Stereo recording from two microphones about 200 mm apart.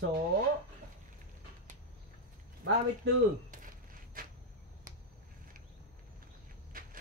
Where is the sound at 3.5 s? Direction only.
45° right (ahead or behind).